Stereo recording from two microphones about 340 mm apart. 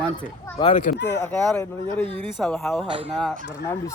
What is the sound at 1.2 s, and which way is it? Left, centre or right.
Speech, centre.